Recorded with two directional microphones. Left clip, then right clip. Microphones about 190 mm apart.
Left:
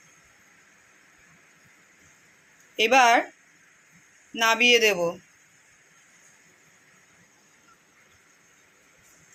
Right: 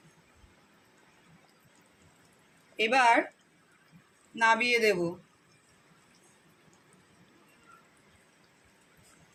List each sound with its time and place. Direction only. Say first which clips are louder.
2.7 s speech: left 5 dB; 30° left (ahead or behind)
4.4 s a man's voice: left 5 dB; 30° left (ahead or behind)